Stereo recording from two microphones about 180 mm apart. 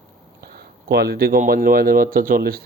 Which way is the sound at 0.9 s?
60° right (ahead or behind).